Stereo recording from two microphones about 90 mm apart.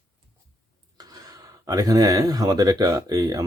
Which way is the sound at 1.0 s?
45° right (ahead or behind).